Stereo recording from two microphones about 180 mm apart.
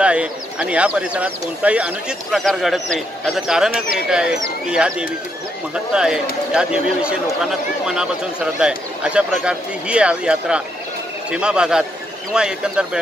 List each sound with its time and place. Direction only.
0.0 s speech: 5° right (ahead or behind)